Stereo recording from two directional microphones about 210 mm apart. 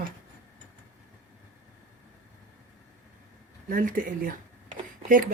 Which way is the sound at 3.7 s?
40° right (ahead or behind).